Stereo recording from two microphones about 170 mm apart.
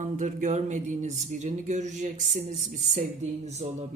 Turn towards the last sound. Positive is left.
turn(degrees=-40)  # may be behind; listen again after turning